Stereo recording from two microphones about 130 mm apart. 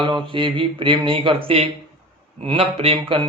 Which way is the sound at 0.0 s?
40° right (ahead or behind).